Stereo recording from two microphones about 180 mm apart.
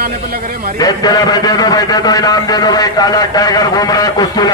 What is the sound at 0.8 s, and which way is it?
A man's voice, 20° left (ahead or behind).